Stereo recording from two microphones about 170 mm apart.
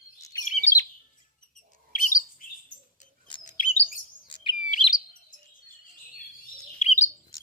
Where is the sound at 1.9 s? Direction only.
50° left (ahead or behind).